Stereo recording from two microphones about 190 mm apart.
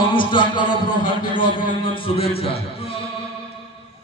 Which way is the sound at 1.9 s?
30° left (ahead or behind).